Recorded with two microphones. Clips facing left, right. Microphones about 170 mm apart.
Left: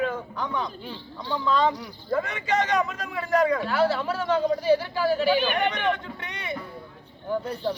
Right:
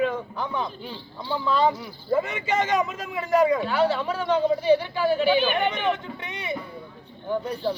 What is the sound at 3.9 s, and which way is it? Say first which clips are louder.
Speech: right 1 dB; 5° left (ahead or behind).